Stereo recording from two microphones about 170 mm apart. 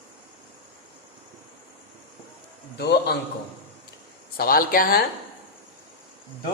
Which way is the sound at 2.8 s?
75° left (ahead or behind).